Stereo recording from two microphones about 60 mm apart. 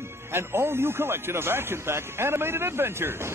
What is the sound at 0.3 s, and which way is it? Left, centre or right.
Speech, right.